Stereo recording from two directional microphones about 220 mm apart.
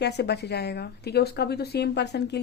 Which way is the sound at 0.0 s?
50° left (ahead or behind).